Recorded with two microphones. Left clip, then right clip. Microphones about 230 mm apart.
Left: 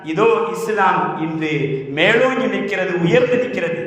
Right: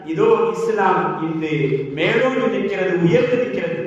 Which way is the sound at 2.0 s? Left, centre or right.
Left.